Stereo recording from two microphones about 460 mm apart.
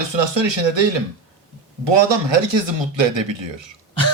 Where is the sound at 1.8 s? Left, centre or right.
Right.